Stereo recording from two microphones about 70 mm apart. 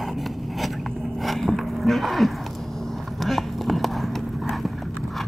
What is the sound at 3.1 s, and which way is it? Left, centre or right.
Clip-clop, centre.